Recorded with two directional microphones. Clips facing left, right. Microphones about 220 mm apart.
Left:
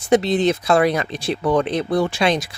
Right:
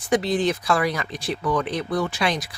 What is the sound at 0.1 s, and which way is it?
Speech, 25° left (ahead or behind).